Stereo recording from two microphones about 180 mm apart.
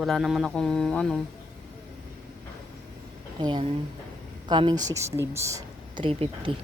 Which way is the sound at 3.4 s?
25° right (ahead or behind).